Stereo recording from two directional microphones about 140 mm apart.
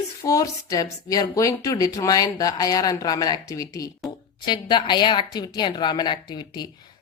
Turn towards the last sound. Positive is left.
turn(degrees=30)  # may be behind; listen again after turning